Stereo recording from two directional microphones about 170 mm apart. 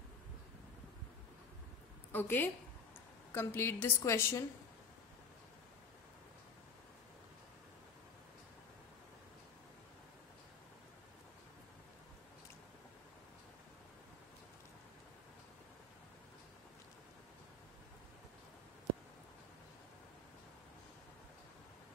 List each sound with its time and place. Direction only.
2.1 s a woman's voice: 10° left (ahead or behind)